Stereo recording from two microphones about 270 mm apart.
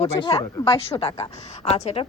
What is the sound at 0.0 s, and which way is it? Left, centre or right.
A woman's voice, centre.